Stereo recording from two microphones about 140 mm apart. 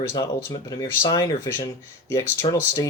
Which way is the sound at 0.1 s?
25° left (ahead or behind).